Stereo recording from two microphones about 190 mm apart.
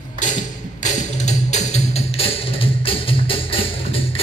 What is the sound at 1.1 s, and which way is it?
Music, 35° left (ahead or behind).